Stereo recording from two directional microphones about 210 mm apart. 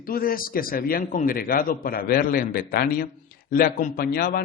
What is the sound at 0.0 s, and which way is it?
A man's voice, 45° left (ahead or behind).